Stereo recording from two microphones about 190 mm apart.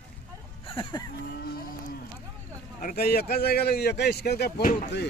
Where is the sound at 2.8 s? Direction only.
50° left (ahead or behind).